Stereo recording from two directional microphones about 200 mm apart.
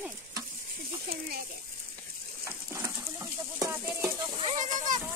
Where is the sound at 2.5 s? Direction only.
10° right (ahead or behind).